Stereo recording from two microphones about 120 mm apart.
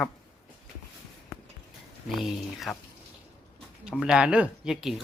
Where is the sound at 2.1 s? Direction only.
Centre (ahead or behind).